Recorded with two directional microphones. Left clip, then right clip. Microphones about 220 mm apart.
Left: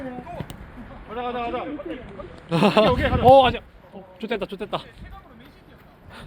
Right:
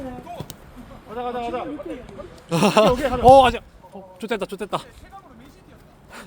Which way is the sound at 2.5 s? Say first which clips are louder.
Right 1 dB; 10° right (ahead or behind).